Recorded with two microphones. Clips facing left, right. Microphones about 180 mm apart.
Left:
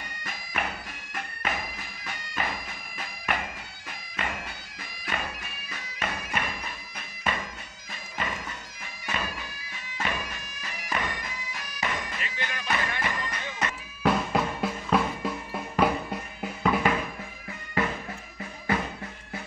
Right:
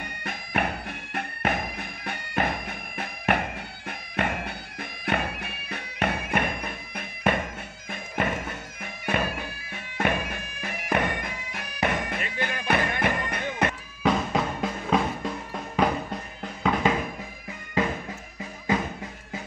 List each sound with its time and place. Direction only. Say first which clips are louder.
0.0 s bagpipes: right 5 dB; 60° right (ahead or behind)
14.0 s drum: right 1 dB; 5° left (ahead or behind)